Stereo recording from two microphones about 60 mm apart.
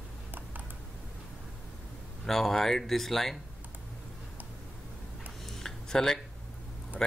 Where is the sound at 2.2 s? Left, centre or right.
Centre.